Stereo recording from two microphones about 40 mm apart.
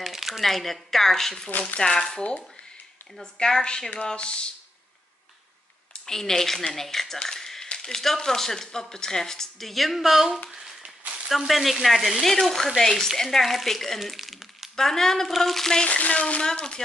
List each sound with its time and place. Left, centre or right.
0.0 s a sound: centre
0.4 s speech: centre
3.3 s speech: centre
6.0 s speech: centre
7.2 s a sound: centre
7.8 s speech: centre
10.5 s a sound: centre
11.2 s frying: centre
12.3 s speech: centre
14.8 s speech: centre
15.3 s frying: centre
16.0 s speech: left